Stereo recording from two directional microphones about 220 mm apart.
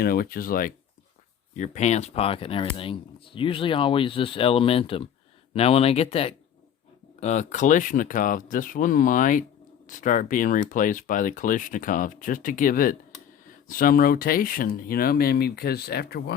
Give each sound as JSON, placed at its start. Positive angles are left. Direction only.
{"t": 0.0, "sound": "speech", "side_deg": 45}